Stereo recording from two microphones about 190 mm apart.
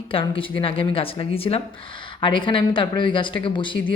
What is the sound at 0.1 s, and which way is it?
Speech, 30° left (ahead or behind).